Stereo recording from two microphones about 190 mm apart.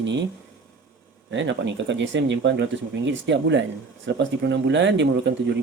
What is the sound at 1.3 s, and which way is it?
Speech, 70° right (ahead or behind).